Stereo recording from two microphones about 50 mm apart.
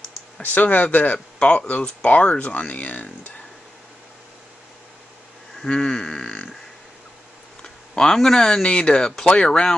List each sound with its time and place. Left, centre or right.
0.4 s speech: left
5.6 s grunt: centre
7.6 s speech: centre